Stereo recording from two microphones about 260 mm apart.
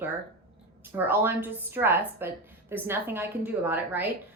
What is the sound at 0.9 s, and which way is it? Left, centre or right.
A woman's voice, centre.